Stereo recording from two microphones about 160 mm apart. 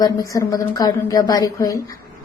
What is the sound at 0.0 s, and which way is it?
Speech, 20° left (ahead or behind).